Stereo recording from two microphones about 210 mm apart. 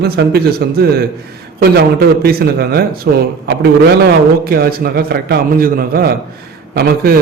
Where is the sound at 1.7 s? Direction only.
50° right (ahead or behind).